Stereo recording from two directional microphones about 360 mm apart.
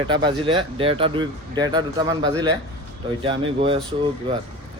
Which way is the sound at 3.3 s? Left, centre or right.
Centre.